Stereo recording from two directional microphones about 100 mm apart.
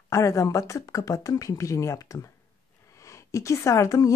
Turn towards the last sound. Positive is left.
turn(degrees=30)  # may be behind; listen again after turning